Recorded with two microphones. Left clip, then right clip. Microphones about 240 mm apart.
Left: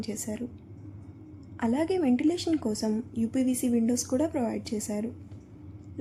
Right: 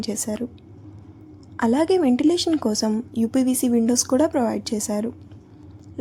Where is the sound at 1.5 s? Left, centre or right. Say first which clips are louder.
Right 8 dB; centre.